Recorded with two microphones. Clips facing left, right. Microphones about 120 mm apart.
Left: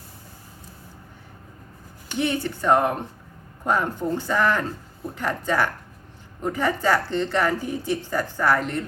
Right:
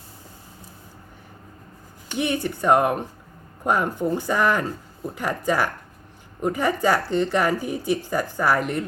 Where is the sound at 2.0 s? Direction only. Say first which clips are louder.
Even; 15° right (ahead or behind).